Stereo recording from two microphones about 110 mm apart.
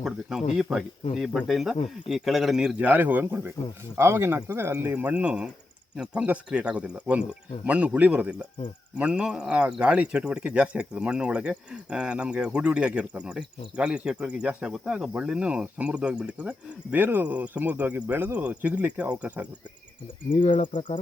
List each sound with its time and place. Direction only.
0.0 s speech: 5° right (ahead or behind)